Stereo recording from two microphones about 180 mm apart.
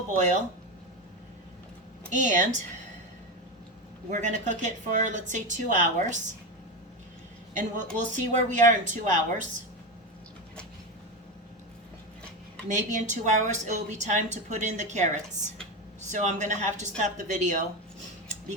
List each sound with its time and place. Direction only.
0.2 s a woman's voice: 40° right (ahead or behind)
2.1 s a woman's voice: 45° right (ahead or behind)
4.1 s a woman's voice: 40° right (ahead or behind)
7.5 s a woman's voice: 45° right (ahead or behind)
12.6 s a woman's voice: 40° right (ahead or behind)